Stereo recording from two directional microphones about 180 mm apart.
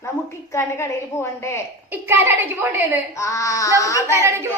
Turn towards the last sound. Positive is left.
turn(degrees=-15)  # may be behind; listen again after turning